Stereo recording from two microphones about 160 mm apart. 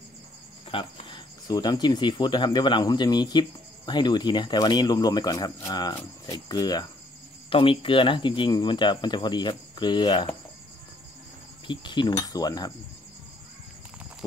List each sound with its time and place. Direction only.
0.7 s speech: 35° left (ahead or behind)
11.6 s speech: 30° left (ahead or behind)